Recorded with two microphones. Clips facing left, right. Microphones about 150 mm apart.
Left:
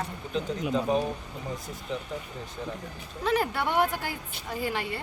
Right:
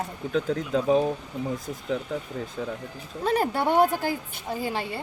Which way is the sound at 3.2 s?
35° right (ahead or behind).